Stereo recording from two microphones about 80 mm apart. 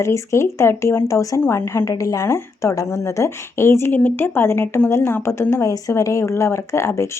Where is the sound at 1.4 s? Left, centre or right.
Left.